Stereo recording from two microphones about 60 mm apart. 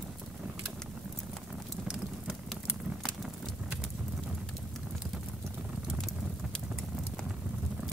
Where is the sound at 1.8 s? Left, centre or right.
Centre.